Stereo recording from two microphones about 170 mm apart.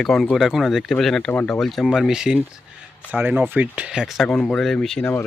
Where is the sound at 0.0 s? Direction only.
5° left (ahead or behind).